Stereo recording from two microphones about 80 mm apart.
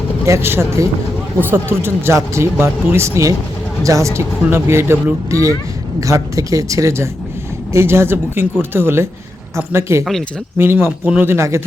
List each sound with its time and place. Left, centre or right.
0.3 s speech: right
5.3 s speech: right
10.0 s speech: centre
10.6 s speech: right